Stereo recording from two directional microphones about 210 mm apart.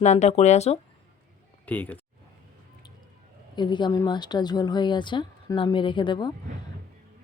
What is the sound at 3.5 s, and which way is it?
Speech, 20° left (ahead or behind).